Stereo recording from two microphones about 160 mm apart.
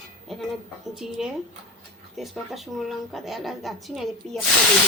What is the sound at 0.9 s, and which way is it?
Speech, centre (ahead or behind).